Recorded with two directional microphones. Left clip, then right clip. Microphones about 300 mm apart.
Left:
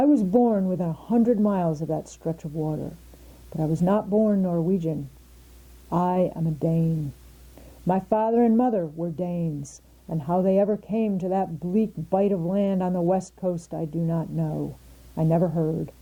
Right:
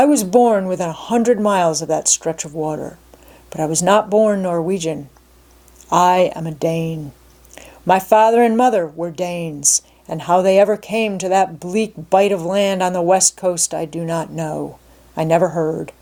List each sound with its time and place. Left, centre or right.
0.0 s speech: centre
7.9 s speech: centre